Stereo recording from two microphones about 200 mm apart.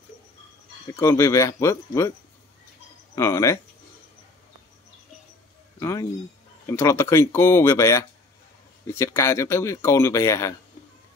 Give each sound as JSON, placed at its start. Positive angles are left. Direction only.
{"t": 0.9, "sound": "speech", "side_deg": 15}
{"t": 3.2, "sound": "speech", "side_deg": 15}
{"t": 5.8, "sound": "speech", "side_deg": 15}